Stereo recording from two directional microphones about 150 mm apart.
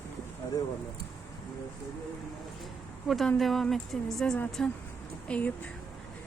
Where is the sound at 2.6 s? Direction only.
Centre (ahead or behind).